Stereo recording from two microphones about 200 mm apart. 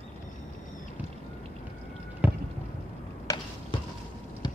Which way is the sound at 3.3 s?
15° left (ahead or behind).